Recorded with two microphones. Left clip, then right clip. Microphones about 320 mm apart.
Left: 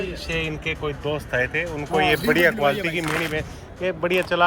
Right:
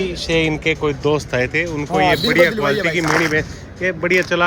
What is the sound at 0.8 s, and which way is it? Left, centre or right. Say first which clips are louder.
Speech: right 9 dB; centre.